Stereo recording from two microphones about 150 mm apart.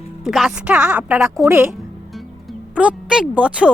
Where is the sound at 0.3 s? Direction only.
Centre (ahead or behind).